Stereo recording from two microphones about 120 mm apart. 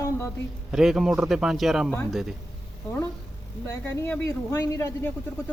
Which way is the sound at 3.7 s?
20° left (ahead or behind).